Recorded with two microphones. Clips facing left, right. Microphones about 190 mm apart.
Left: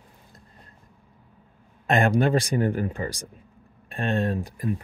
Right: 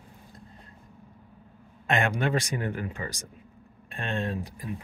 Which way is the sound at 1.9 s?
35° left (ahead or behind).